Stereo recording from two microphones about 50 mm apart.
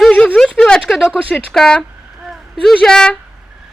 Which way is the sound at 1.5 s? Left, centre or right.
Centre.